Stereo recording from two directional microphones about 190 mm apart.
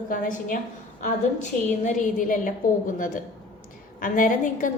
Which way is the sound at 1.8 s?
40° left (ahead or behind).